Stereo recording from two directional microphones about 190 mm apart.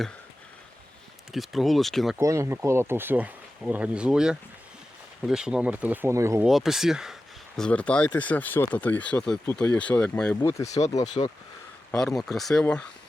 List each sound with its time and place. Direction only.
1.3 s speech: centre (ahead or behind)
2.1 s speech: 15° right (ahead or behind)
6.5 s speech: centre (ahead or behind)
10.8 s speech: 35° left (ahead or behind)
11.9 s speech: centre (ahead or behind)